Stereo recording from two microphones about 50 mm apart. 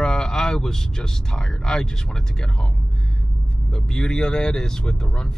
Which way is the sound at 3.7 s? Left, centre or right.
Centre.